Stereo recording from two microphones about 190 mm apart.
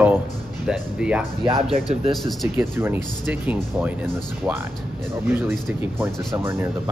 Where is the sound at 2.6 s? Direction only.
10° right (ahead or behind).